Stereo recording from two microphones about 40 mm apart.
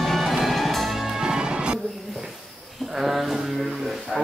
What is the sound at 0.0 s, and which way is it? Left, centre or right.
Music, centre.